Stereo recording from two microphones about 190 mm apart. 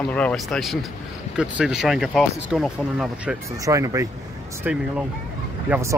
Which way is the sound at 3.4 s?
15° right (ahead or behind).